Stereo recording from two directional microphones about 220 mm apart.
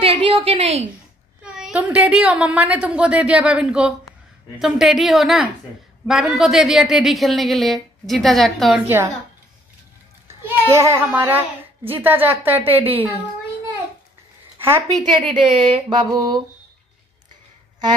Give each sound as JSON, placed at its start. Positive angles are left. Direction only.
{"t": 0.0, "sound": "a woman's voice", "side_deg": -25}
{"t": 1.4, "sound": "a woman's voice", "side_deg": -5}
{"t": 10.2, "sound": "a child's voice", "side_deg": -10}
{"t": 14.6, "sound": "a woman's voice", "side_deg": -10}
{"t": 15.0, "sound": "speech", "side_deg": -20}